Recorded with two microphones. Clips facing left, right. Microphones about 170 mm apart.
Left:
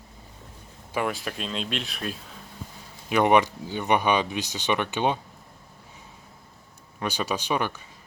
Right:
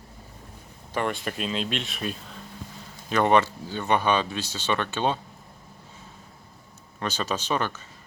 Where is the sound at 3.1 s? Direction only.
15° left (ahead or behind).